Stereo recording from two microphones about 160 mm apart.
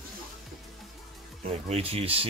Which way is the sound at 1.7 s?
40° right (ahead or behind).